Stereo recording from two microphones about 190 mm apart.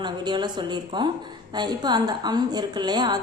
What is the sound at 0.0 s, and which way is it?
A woman's voice, 25° right (ahead or behind).